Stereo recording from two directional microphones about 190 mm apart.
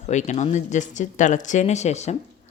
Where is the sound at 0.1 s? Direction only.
40° left (ahead or behind).